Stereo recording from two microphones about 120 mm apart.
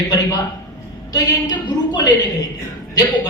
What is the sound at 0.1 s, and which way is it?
A woman's voice, 30° left (ahead or behind).